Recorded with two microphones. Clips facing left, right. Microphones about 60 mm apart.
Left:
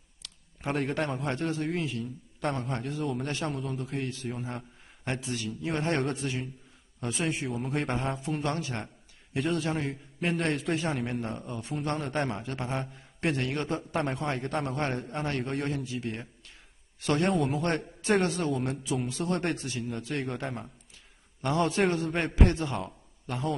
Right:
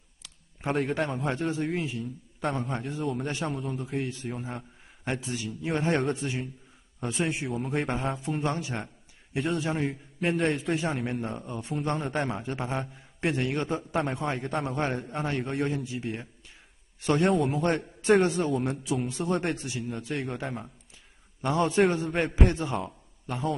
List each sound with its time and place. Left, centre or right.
0.7 s a man's voice: centre
5.3 s a man's voice: centre
5.7 s a man's voice: centre
8.5 s a man's voice: centre
8.7 s a sound: centre
9.7 s a man's voice: centre
15.7 s a man's voice: centre
17.1 s a man's voice: centre